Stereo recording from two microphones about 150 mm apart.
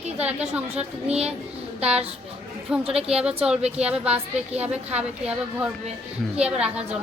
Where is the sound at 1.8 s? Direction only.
45° right (ahead or behind).